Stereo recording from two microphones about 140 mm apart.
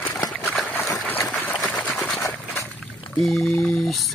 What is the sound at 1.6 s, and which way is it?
Sewing machine, 10° left (ahead or behind).